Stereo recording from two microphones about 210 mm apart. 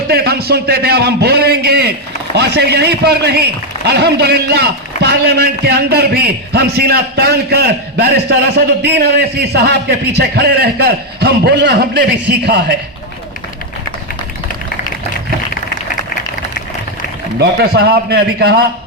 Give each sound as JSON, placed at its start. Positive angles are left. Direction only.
{"t": 0.1, "sound": "a man's voice", "side_deg": -50}
{"t": 17.6, "sound": "a man's voice", "side_deg": -50}